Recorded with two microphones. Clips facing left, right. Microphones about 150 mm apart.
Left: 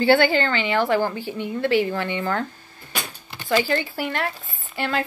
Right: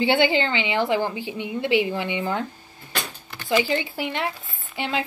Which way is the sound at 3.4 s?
15° right (ahead or behind).